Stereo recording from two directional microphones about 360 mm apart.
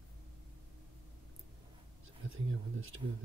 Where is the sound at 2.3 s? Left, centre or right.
Right.